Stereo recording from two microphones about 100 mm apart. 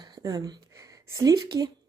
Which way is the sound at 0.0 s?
40° right (ahead or behind).